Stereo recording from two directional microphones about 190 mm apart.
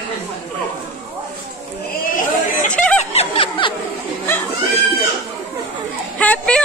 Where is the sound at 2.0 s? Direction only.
45° left (ahead or behind).